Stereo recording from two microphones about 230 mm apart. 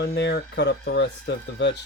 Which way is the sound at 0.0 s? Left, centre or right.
Left.